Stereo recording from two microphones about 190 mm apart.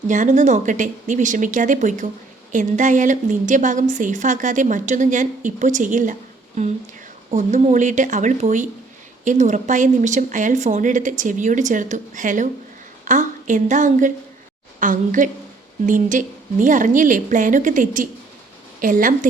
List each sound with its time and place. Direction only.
0.1 s a woman's voice: 40° right (ahead or behind)
7.3 s a woman's voice: 35° right (ahead or behind)